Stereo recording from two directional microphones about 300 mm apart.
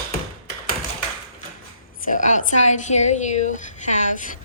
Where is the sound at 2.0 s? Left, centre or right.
Left.